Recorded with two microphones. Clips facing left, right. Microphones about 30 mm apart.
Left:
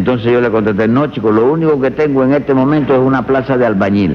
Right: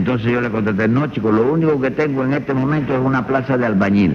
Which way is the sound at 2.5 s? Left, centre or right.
Left.